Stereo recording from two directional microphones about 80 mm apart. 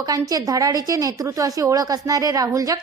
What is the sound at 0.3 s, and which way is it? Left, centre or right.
A woman's voice, right.